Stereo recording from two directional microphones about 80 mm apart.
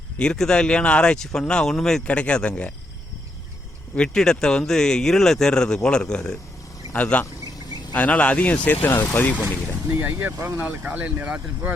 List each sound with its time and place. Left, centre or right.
0.2 s speech: centre
3.9 s speech: centre
9.9 s speech: right
10.3 s speech: right
10.6 s speech: right